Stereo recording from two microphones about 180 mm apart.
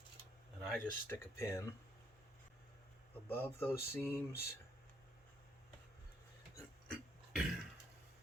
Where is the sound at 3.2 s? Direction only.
10° left (ahead or behind).